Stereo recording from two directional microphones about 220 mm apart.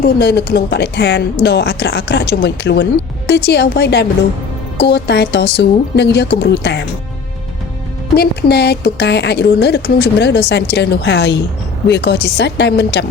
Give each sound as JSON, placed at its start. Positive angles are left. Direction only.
{"t": 0.0, "sound": "speech", "side_deg": 45}
{"t": 8.1, "sound": "speech", "side_deg": 45}